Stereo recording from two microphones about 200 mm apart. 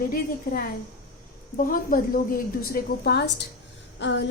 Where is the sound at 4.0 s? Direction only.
60° left (ahead or behind).